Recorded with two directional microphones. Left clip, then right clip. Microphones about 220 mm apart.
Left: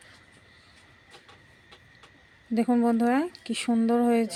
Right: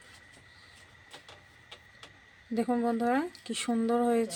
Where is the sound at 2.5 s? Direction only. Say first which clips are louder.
Left 5 dB; 20° left (ahead or behind).